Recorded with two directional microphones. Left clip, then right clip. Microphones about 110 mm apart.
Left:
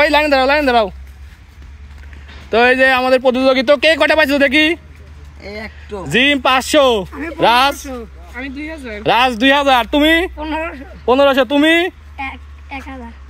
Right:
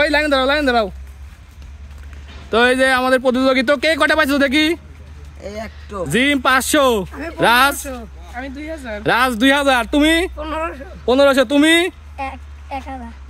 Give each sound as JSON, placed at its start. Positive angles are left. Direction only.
{"t": 0.2, "sound": "speech", "side_deg": -15}
{"t": 2.5, "sound": "speech", "side_deg": -25}
{"t": 6.1, "sound": "speech", "side_deg": -30}
{"t": 6.6, "sound": "speech", "side_deg": -45}
{"t": 8.4, "sound": "speech", "side_deg": -35}
{"t": 10.4, "sound": "speech", "side_deg": -45}
{"t": 11.1, "sound": "speech", "side_deg": -25}
{"t": 11.5, "sound": "speech", "side_deg": -40}